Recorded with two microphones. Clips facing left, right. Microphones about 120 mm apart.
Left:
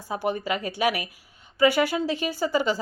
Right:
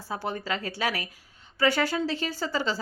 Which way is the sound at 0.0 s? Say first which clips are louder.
Left 5 dB; 15° left (ahead or behind).